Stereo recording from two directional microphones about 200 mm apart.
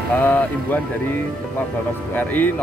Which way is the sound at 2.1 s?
10° left (ahead or behind).